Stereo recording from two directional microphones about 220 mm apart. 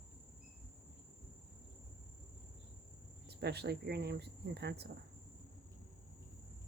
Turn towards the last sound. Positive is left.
turn(degrees=-50)  # may be behind; listen again after turning